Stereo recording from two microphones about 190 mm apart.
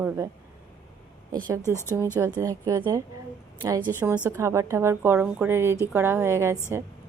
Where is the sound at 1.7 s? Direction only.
15° left (ahead or behind).